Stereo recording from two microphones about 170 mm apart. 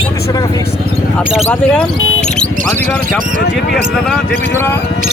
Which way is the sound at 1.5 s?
5° left (ahead or behind).